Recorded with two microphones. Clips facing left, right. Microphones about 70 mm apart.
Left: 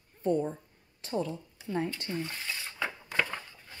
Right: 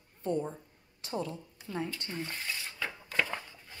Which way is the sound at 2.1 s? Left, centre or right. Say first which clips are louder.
Left 4 dB; centre.